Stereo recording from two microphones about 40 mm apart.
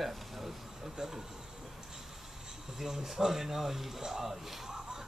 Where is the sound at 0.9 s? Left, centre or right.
Centre.